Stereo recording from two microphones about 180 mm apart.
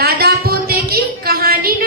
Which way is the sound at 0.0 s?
60° right (ahead or behind).